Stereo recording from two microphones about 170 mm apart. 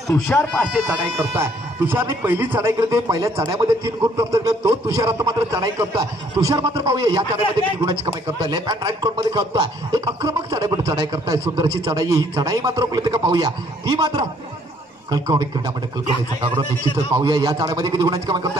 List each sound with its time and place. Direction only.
0.1 s speech: 10° left (ahead or behind)
0.8 s a man's voice: 15° right (ahead or behind)
17.1 s a man's voice: 25° right (ahead or behind)